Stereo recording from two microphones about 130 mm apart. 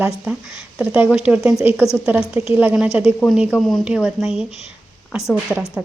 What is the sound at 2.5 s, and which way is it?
A woman's voice, 10° right (ahead or behind).